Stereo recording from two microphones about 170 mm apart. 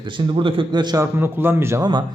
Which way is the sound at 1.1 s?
10° right (ahead or behind).